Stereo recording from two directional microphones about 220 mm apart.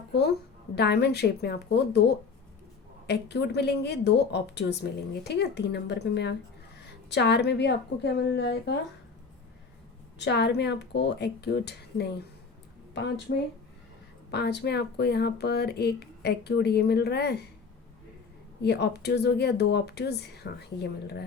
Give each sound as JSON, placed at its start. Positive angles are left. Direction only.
{"t": 0.1, "sound": "a woman's voice", "side_deg": 50}
{"t": 10.2, "sound": "a woman's voice", "side_deg": 50}
{"t": 14.3, "sound": "a woman's voice", "side_deg": 50}
{"t": 18.6, "sound": "a woman's voice", "side_deg": 50}